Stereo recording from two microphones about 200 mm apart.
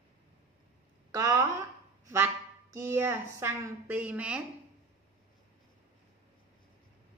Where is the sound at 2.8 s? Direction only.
10° right (ahead or behind).